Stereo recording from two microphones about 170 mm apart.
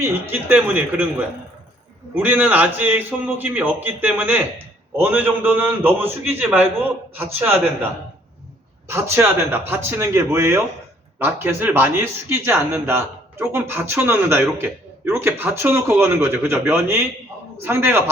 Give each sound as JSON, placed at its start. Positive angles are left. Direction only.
{"t": 0.0, "sound": "a man's voice", "side_deg": -10}
{"t": 2.1, "sound": "a man's voice", "side_deg": -10}
{"t": 8.9, "sound": "a man's voice", "side_deg": -15}